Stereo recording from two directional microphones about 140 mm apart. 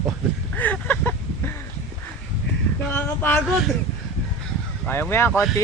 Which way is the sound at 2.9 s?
10° left (ahead or behind).